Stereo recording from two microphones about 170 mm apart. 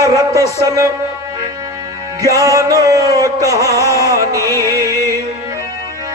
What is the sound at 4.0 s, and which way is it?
Music, 20° right (ahead or behind).